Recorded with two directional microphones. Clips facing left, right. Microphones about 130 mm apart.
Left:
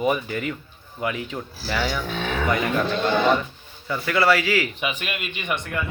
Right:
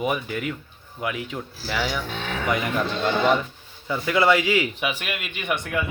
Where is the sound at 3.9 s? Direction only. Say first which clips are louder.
Right 1 dB; 20° right (ahead or behind).